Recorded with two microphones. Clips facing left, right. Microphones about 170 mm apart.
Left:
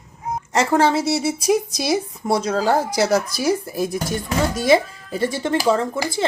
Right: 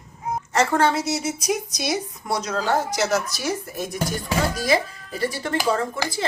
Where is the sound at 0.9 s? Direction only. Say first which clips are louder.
Left 5 dB; 30° left (ahead or behind).